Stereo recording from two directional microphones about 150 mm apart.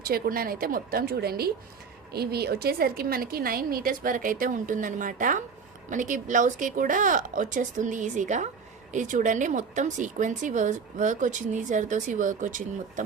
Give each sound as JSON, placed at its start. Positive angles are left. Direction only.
{"t": 0.0, "sound": "a woman's voice", "side_deg": -85}